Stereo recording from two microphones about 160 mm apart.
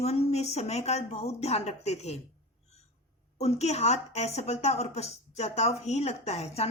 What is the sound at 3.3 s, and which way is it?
A woman's voice, 45° left (ahead or behind).